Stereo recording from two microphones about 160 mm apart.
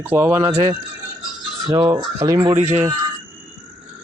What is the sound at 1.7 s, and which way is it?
Speech, 25° right (ahead or behind).